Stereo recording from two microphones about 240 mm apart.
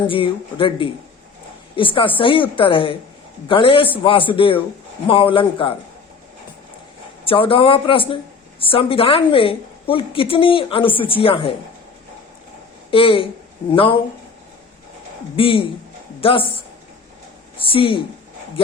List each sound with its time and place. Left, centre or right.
0.1 s a woman's voice: left
7.3 s a woman's voice: left
12.9 s a woman's voice: left
15.4 s a woman's voice: left